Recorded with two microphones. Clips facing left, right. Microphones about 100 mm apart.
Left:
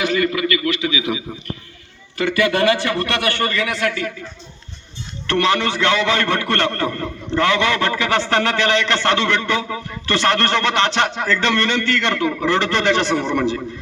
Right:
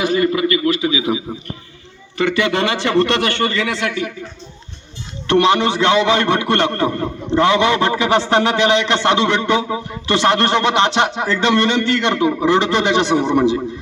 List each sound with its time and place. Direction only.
0.0 s a man's voice: 30° right (ahead or behind)
5.3 s a man's voice: 20° right (ahead or behind)